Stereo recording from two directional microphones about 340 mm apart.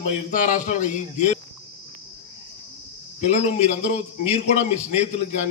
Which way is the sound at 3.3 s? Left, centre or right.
Left.